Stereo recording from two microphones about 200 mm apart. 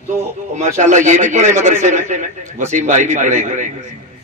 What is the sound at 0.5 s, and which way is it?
A man's voice, 35° right (ahead or behind).